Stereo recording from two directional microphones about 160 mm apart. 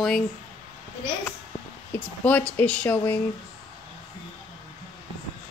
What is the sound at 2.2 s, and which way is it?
Speech, 10° left (ahead or behind).